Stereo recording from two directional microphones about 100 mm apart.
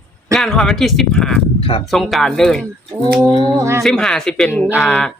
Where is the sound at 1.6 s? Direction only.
60° left (ahead or behind).